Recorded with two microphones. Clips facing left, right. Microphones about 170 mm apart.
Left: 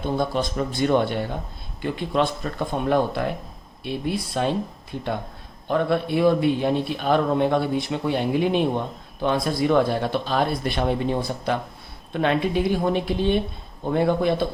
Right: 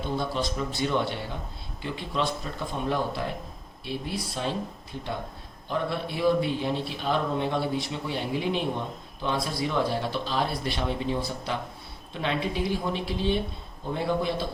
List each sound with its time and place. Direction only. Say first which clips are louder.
0.2 s a man's voice: left 5 dB; 50° left (ahead or behind)
5.6 s speech: left 7 dB; 55° left (ahead or behind)